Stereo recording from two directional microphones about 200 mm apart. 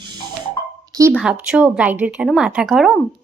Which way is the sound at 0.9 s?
15° right (ahead or behind).